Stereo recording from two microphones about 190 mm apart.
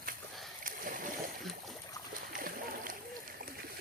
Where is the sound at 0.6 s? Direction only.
45° right (ahead or behind).